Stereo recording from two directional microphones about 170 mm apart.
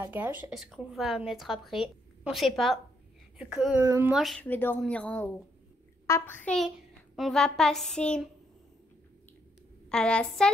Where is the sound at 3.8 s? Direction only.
15° right (ahead or behind).